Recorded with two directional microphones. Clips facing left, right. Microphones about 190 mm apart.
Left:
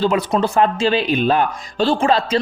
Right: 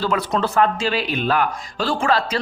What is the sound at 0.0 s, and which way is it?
Speech, 20° left (ahead or behind).